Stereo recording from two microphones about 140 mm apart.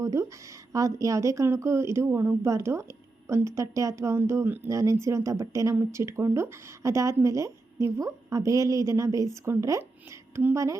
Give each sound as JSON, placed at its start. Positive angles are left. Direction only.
{"t": 0.0, "sound": "a woman's voice", "side_deg": -20}